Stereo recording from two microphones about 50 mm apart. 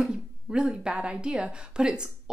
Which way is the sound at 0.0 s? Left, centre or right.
Centre.